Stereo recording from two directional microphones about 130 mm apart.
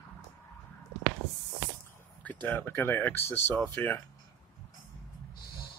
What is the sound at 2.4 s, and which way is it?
Speech, 15° left (ahead or behind).